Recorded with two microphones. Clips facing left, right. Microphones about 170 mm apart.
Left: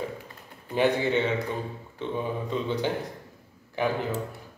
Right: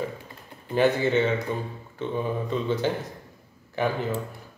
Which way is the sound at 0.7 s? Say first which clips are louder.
Right 2 dB; 15° left (ahead or behind).